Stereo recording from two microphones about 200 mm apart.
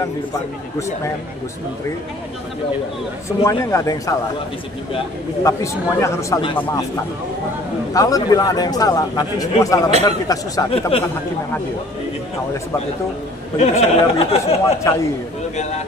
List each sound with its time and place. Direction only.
3.4 s a man's voice: 15° left (ahead or behind)
5.4 s a man's voice: 15° left (ahead or behind)
7.9 s a man's voice: 15° left (ahead or behind)
10.9 s a man's voice: 30° left (ahead or behind)
13.6 s speech: 30° left (ahead or behind)
14.8 s a man's voice: 15° left (ahead or behind)